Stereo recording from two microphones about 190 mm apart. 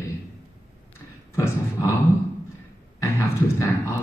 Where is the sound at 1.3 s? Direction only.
15° left (ahead or behind).